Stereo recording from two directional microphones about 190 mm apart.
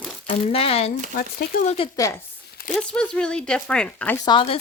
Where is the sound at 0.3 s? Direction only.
30° left (ahead or behind).